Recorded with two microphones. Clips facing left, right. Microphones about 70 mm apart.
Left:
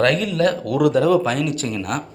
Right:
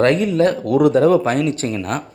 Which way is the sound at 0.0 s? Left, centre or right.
Right.